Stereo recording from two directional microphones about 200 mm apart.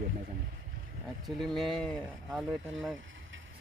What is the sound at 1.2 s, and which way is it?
Speech, centre (ahead or behind).